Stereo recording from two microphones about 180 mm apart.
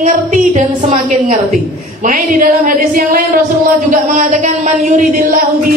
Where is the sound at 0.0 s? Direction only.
45° right (ahead or behind).